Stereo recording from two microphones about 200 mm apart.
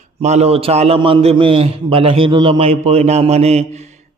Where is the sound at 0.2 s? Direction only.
35° right (ahead or behind).